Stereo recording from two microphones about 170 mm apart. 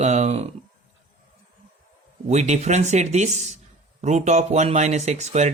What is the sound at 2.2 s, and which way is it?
Speech, 40° right (ahead or behind).